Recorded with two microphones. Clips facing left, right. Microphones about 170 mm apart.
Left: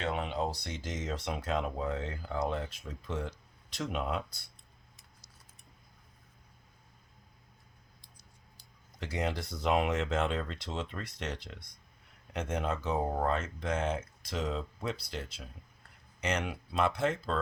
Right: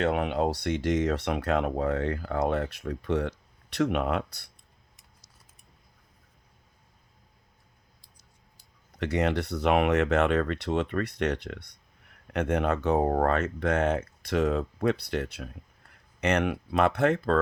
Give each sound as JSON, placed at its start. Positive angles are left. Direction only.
{"t": 0.0, "sound": "speech", "side_deg": -55}
{"t": 9.0, "sound": "speech", "side_deg": -70}